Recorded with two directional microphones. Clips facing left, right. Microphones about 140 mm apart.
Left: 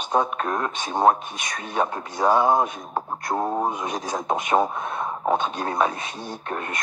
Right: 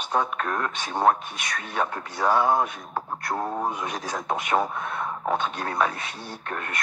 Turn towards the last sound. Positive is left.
turn(degrees=25)  # may be behind; listen again after turning